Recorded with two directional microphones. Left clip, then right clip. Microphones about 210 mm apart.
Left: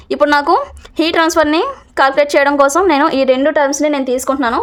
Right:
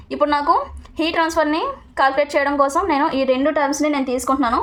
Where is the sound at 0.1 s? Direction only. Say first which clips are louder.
Left 5 dB; 45° left (ahead or behind).